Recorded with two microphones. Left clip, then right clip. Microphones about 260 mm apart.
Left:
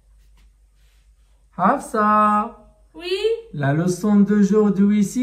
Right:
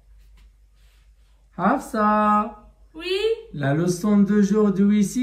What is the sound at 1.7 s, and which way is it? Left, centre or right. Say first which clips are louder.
Speech: left 3 dB; centre.